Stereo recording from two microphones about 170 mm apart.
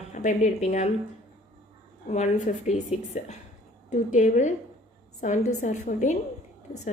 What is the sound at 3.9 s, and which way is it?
A woman's voice, 45° left (ahead or behind).